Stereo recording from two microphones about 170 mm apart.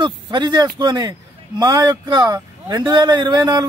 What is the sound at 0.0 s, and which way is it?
Speech, 25° right (ahead or behind).